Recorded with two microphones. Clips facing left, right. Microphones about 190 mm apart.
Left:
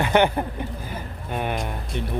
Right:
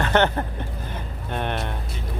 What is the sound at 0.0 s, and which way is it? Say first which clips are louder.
Speech: left 1 dB; 10° left (ahead or behind).